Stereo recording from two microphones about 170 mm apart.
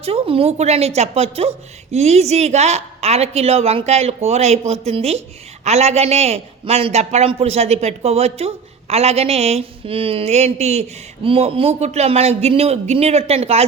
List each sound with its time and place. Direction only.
0.0 s a man's voice: 35° right (ahead or behind)